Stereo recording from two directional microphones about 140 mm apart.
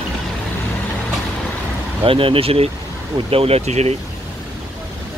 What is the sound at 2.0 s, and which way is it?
Speech, 40° right (ahead or behind).